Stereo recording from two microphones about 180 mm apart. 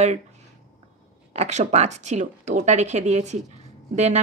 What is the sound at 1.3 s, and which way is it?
A woman's voice, 35° right (ahead or behind).